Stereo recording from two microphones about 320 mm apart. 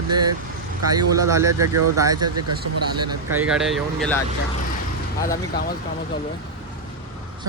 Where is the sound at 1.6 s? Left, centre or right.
Right.